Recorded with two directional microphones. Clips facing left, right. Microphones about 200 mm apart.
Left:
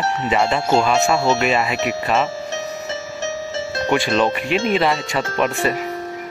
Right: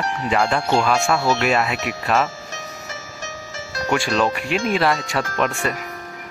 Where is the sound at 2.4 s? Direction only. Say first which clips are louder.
Left 8 dB; 25° left (ahead or behind).